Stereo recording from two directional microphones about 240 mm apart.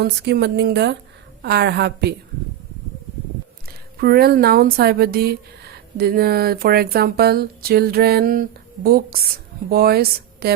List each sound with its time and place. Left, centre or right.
0.0 s speech: right
4.0 s speech: right